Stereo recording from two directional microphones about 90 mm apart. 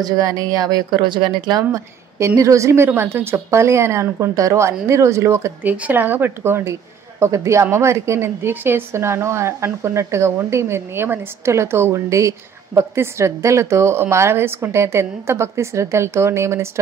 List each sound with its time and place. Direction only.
0.0 s a woman's voice: 40° right (ahead or behind); by 1.6 s 60° right (ahead or behind)
1.6 s a woman's voice: 35° right (ahead or behind)
5.6 s a woman's voice: 20° right (ahead or behind)